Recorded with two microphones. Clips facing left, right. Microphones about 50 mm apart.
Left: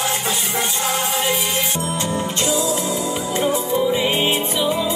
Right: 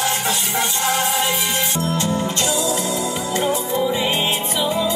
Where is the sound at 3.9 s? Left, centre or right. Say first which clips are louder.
Left 2 dB; centre.